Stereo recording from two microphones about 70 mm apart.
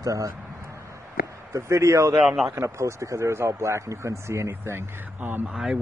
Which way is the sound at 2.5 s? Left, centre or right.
Right.